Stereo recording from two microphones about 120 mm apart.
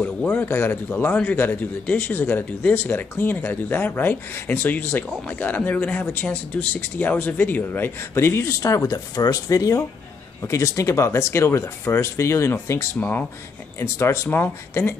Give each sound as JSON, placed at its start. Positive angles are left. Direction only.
{"t": 0.0, "sound": "a man's voice", "side_deg": 10}